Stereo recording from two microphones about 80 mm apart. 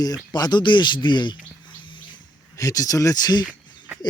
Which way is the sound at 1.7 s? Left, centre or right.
Left.